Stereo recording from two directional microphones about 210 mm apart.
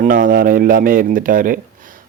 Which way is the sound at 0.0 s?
40° right (ahead or behind).